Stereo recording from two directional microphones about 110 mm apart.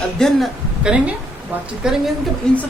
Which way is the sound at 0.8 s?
10° right (ahead or behind).